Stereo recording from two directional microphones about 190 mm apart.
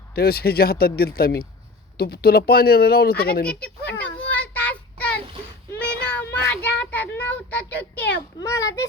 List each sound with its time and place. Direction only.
0.1 s speech: 55° left (ahead or behind)
3.4 s a child's voice: 5° left (ahead or behind)
4.3 s child singing: 10° left (ahead or behind)
6.0 s a child's voice: 10° left (ahead or behind)